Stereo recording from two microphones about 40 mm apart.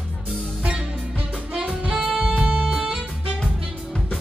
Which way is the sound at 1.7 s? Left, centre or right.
Right.